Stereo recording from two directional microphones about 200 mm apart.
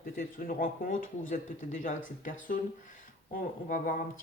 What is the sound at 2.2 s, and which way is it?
A man's voice, 40° left (ahead or behind).